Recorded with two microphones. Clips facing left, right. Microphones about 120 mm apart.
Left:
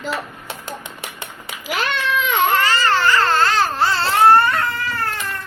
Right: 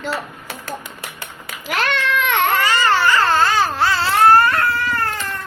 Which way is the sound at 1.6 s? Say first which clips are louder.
Right 1 dB; 5° left (ahead or behind).